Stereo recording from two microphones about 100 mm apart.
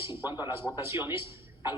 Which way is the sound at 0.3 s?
25° right (ahead or behind).